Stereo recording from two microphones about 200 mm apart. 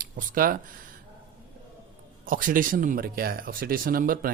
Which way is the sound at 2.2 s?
45° right (ahead or behind).